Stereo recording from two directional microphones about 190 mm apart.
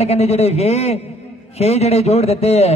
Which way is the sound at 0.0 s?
35° left (ahead or behind).